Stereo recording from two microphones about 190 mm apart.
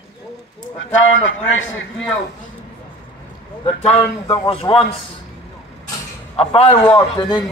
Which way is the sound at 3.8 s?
30° left (ahead or behind).